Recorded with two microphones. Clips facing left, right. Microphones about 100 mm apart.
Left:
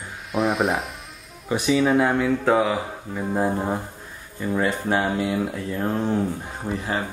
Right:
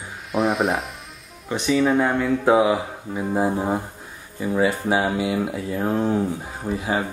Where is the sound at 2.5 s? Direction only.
10° right (ahead or behind).